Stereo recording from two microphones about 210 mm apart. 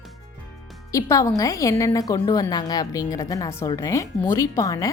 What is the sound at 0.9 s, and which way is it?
A woman's voice, 15° left (ahead or behind).